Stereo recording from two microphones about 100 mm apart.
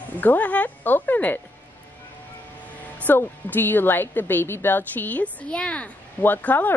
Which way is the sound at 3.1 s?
20° left (ahead or behind).